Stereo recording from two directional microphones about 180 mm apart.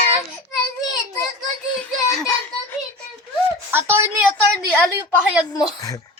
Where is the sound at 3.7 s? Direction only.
15° right (ahead or behind).